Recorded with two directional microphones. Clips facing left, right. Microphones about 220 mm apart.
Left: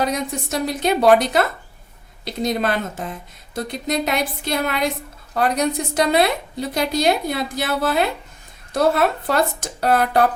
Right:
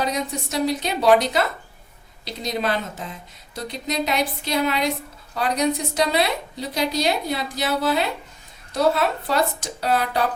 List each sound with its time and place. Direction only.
0.0 s a woman's voice: 50° left (ahead or behind)